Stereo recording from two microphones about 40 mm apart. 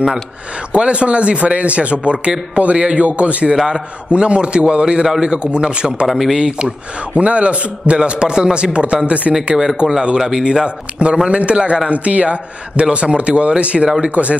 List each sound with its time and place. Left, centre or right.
0.7 s a man's voice: right
6.0 s speech: centre
6.3 s speech: centre
7.2 s speech: right
9.3 s speech: centre
9.8 s speech: right
11.9 s a man's voice: right